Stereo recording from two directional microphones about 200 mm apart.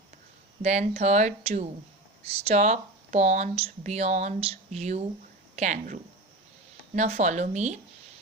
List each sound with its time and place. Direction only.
0.6 s speech: 35° right (ahead or behind)